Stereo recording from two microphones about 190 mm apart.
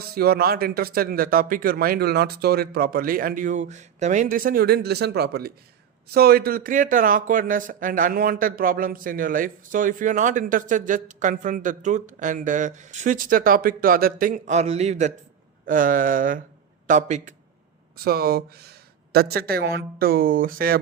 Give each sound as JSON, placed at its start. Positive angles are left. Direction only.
{"t": 0.1, "sound": "speech", "side_deg": -55}
{"t": 17.9, "sound": "speech", "side_deg": -55}